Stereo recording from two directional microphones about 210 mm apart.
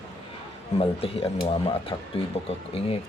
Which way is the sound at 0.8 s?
25° left (ahead or behind).